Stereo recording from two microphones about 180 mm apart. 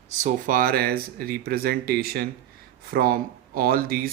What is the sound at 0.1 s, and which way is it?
Speech, 40° right (ahead or behind).